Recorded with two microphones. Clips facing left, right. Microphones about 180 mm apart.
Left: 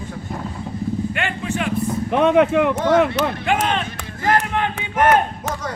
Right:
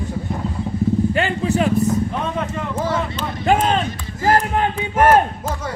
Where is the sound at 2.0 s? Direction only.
70° left (ahead or behind).